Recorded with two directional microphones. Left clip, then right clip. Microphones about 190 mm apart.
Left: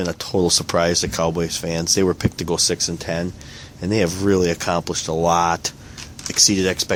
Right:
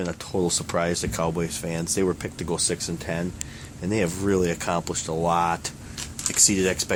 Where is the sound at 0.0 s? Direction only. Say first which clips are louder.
Left 6 dB; 50° left (ahead or behind).